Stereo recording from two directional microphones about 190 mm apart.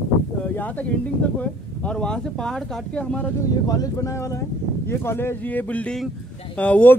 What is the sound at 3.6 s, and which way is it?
Speech, 20° left (ahead or behind).